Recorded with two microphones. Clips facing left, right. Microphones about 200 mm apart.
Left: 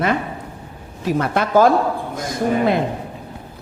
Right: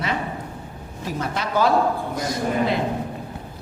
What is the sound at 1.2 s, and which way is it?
Speech, 55° left (ahead or behind).